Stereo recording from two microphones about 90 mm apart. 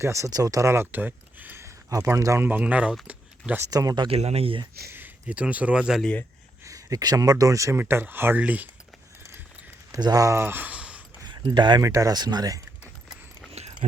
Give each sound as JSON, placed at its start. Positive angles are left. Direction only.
{"t": 0.0, "sound": "speech", "side_deg": -35}
{"t": 1.6, "sound": "speech", "side_deg": -35}
{"t": 2.5, "sound": "speech", "side_deg": -15}
{"t": 3.1, "sound": "a sound", "side_deg": -15}
{"t": 3.7, "sound": "speech", "side_deg": -40}
{"t": 4.0, "sound": "speech", "side_deg": -90}
{"t": 4.9, "sound": "speech", "side_deg": -20}
{"t": 6.7, "sound": "speech", "side_deg": -40}
{"t": 7.8, "sound": "speech", "side_deg": -25}
{"t": 9.9, "sound": "speech", "side_deg": -45}
{"t": 11.2, "sound": "a sound", "side_deg": -55}
{"t": 11.8, "sound": "speech", "side_deg": -40}